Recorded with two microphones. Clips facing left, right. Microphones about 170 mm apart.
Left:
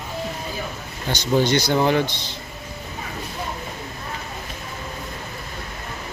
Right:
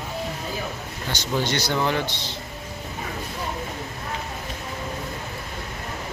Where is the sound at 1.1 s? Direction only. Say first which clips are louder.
Left 6 dB; 15° left (ahead or behind).